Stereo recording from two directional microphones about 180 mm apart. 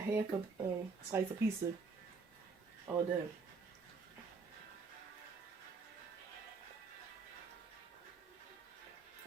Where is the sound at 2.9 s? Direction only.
10° right (ahead or behind).